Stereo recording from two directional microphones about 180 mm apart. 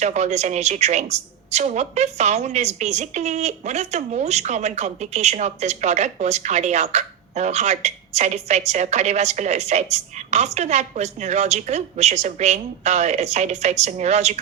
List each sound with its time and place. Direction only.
0.0 s speech: 40° right (ahead or behind)